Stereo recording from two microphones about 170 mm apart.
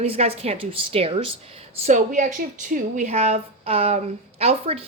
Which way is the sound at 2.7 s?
45° right (ahead or behind).